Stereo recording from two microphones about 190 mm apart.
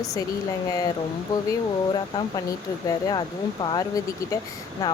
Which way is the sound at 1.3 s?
20° left (ahead or behind).